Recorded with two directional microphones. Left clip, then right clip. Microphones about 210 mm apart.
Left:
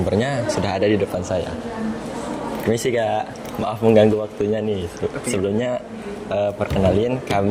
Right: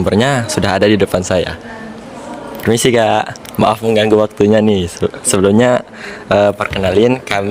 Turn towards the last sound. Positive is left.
turn(degrees=-45)  # may be behind; listen again after turning